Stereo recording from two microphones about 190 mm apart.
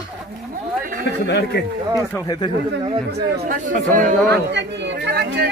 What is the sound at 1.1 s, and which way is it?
Speech, 65° left (ahead or behind).